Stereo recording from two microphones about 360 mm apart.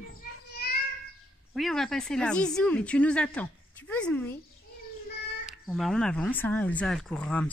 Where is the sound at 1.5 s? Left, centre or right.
Centre.